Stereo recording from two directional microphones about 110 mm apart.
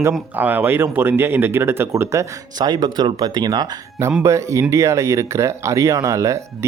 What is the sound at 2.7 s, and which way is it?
Speech, 40° right (ahead or behind).